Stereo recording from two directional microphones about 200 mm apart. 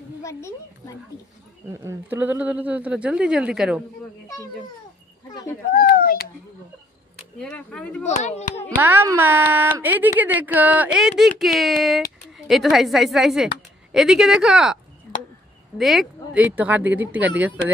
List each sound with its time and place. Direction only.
0.2 s a woman's voice: 15° left (ahead or behind)
1.7 s speech: 15° right (ahead or behind)
5.3 s speech: 15° left (ahead or behind)
5.7 s a child's voice: 45° left (ahead or behind)
7.3 s speech: 5° left (ahead or behind)
8.2 s speech: 35° left (ahead or behind)
8.7 s speech: 10° right (ahead or behind)
15.8 s speech: centre (ahead or behind)